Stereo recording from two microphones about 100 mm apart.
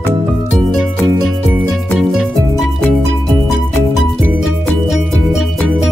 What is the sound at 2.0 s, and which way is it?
Music, 5° right (ahead or behind).